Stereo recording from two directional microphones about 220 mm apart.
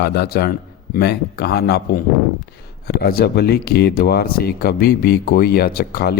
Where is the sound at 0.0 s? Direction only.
45° left (ahead or behind).